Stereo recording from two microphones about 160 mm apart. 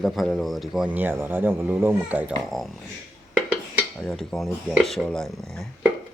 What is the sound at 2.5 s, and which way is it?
Speech, centre (ahead or behind).